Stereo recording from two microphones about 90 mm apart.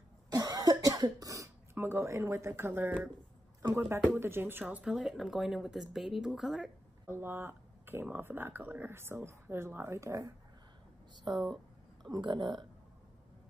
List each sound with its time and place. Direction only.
0.3 s cough: 45° right (ahead or behind)
1.8 s speech: 30° right (ahead or behind)
3.9 s speech: 20° right (ahead or behind); by 6.7 s 5° right (ahead or behind)
7.1 s speech: 25° right (ahead or behind)
11.3 s a sound: 5° left (ahead or behind)
12.1 s speech: 55° right (ahead or behind)